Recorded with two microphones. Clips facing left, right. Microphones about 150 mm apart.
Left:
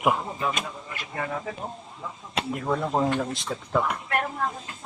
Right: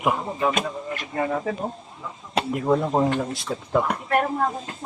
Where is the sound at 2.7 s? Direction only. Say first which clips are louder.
Right 5 dB; 15° right (ahead or behind).